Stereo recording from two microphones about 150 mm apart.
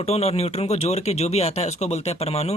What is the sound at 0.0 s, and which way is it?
Speech, 45° left (ahead or behind).